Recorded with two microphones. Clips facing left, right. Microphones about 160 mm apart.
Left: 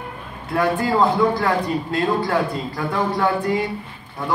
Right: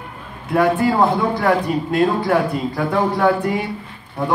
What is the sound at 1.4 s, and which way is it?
A man's voice, 20° right (ahead or behind).